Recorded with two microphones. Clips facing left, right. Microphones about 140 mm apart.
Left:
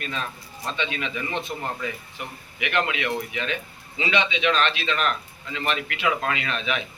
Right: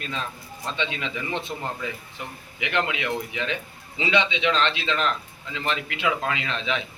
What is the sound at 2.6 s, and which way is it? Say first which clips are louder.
A man's voice: left 1 dB; 20° right (ahead or behind).